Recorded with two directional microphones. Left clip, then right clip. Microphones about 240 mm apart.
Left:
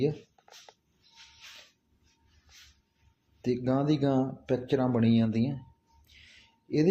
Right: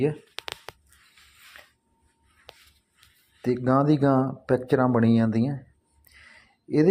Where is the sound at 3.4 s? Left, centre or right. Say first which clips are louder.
Right 6 dB; centre.